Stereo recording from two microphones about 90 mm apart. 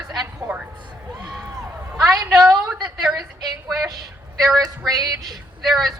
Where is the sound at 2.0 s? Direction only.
40° right (ahead or behind).